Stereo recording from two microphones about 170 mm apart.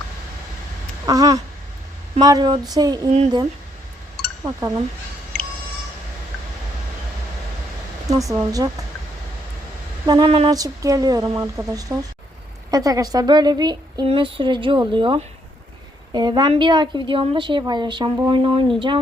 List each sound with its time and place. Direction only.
1.0 s a woman's voice: 20° right (ahead or behind)
4.4 s a woman's voice: 20° right (ahead or behind)
5.3 s a sound: 5° left (ahead or behind)
8.1 s a woman's voice: 20° right (ahead or behind)
10.1 s speech: 30° right (ahead or behind)
10.5 s a woman's voice: 20° right (ahead or behind)